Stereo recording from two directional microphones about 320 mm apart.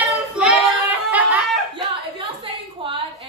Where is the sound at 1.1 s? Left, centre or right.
Centre.